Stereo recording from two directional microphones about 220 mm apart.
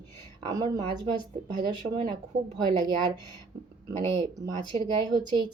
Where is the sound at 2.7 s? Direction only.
20° right (ahead or behind).